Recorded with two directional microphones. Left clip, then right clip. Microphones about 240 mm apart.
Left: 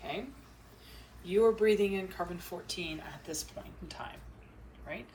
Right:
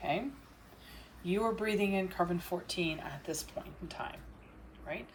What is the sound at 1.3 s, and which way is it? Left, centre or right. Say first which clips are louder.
Speech: left 7 dB; right.